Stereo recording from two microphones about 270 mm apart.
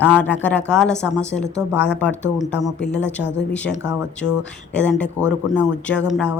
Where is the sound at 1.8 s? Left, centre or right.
Left.